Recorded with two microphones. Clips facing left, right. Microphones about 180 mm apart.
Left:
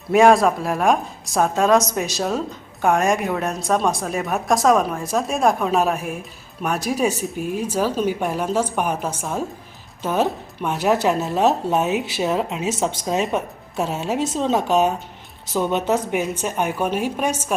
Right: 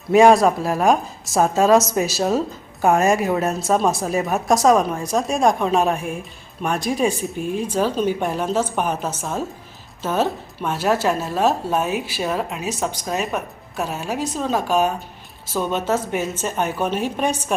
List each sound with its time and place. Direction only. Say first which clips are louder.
0.1 s a woman's voice: right 1 dB; centre (ahead or behind)